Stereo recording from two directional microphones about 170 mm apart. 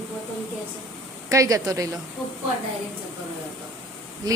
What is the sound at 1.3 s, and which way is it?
Speech, 20° right (ahead or behind).